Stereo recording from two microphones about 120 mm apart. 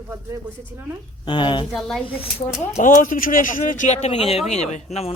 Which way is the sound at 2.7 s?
90° left.